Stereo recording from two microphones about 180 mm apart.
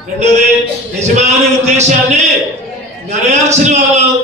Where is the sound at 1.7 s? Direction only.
40° right (ahead or behind).